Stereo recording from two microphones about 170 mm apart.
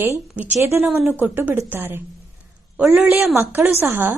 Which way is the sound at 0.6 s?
15° right (ahead or behind).